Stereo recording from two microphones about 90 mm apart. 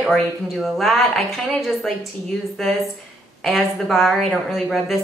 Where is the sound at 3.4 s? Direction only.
Centre (ahead or behind).